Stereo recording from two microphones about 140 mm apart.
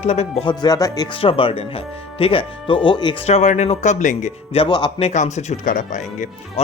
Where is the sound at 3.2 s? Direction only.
55° left (ahead or behind).